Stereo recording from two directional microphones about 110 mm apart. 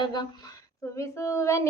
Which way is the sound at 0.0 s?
40° left (ahead or behind).